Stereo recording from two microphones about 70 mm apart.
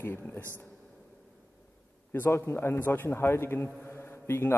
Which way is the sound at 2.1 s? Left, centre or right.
Left.